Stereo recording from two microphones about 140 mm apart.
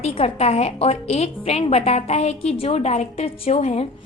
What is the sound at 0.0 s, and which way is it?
A woman's voice, 45° left (ahead or behind).